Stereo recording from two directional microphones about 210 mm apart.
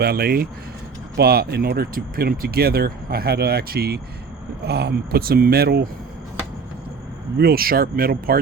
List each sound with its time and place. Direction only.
0.0 s speech: 45° right (ahead or behind)
7.3 s speech: 45° right (ahead or behind)